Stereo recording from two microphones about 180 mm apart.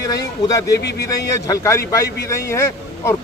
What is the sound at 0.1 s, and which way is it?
Speech, 20° left (ahead or behind).